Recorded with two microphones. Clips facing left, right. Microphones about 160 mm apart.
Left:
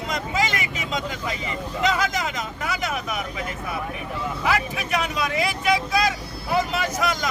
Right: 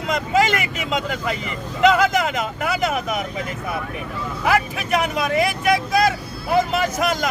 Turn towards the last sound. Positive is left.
turn(degrees=-50)  # may be behind; listen again after turning